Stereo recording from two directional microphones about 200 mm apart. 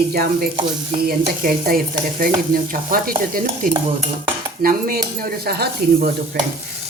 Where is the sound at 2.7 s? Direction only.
45° right (ahead or behind).